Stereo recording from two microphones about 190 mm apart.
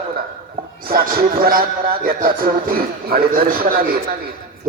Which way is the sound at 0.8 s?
50° right (ahead or behind).